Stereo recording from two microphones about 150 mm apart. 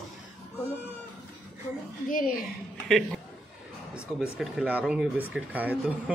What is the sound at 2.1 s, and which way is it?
Speech, 65° left (ahead or behind).